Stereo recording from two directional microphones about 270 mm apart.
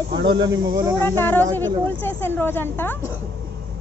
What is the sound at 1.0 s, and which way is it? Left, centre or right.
A woman's voice, centre.